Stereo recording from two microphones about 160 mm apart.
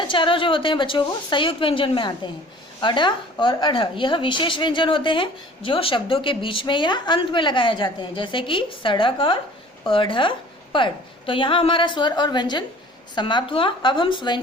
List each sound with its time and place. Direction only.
0.1 s speech: 30° left (ahead or behind)